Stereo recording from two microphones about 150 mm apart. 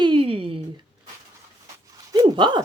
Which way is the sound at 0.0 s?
35° right (ahead or behind).